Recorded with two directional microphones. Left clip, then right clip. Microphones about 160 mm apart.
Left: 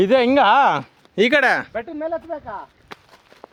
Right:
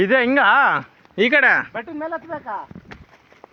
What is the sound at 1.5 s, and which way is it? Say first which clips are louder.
Speech: right 2 dB; 30° left (ahead or behind).